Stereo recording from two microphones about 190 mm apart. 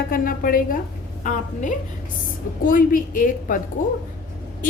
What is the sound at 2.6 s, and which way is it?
Speech, 45° left (ahead or behind).